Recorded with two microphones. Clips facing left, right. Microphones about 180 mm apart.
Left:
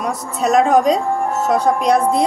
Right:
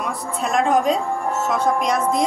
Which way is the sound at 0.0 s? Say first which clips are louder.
Left 5 dB; 40° left (ahead or behind).